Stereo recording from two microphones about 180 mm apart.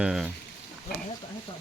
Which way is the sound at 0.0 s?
5° right (ahead or behind).